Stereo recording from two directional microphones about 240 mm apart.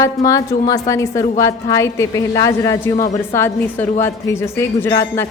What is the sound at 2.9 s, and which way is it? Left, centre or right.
Speech, left.